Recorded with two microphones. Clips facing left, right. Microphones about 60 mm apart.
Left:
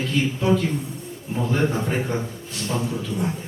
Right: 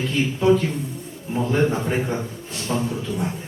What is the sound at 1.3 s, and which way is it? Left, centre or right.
Speech, centre.